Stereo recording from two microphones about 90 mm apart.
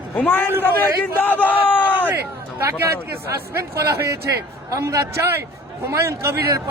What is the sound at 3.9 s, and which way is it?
A man's voice, 30° right (ahead or behind).